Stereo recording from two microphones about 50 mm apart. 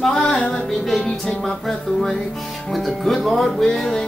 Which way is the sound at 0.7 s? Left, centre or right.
Centre.